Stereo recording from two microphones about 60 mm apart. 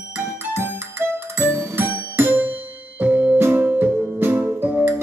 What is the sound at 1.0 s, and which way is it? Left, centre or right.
Music, right.